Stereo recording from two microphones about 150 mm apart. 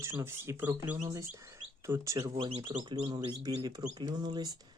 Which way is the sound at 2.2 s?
35° right (ahead or behind).